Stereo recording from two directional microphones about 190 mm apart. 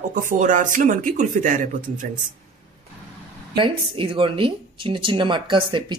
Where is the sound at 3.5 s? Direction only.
25° right (ahead or behind).